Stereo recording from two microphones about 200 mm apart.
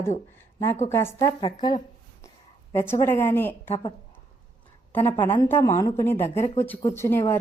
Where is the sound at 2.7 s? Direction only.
10° left (ahead or behind).